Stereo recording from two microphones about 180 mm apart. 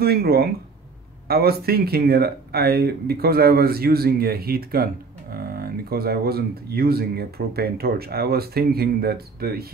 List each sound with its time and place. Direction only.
0.0 s speech: 60° right (ahead or behind)